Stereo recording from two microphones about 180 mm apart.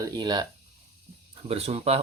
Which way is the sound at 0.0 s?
25° right (ahead or behind).